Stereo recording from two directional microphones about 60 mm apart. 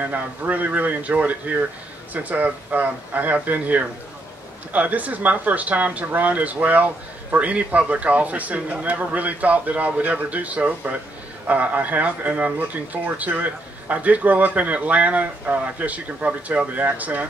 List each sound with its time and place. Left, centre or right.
0.0 s speech: right